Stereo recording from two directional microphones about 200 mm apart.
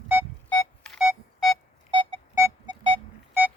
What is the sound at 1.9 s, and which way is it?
Music, 35° right (ahead or behind).